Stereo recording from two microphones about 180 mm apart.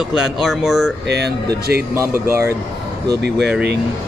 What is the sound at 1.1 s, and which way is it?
Speech, 65° right (ahead or behind).